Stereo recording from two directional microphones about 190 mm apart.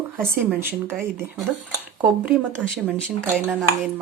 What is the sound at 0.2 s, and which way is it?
Speech, 10° right (ahead or behind).